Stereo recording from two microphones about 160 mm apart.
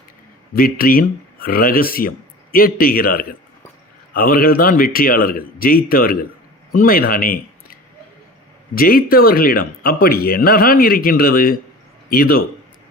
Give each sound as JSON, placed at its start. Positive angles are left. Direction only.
{"t": 0.5, "sound": "speech", "side_deg": 65}